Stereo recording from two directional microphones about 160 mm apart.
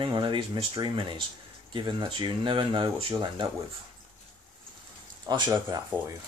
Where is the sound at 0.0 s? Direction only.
30° right (ahead or behind).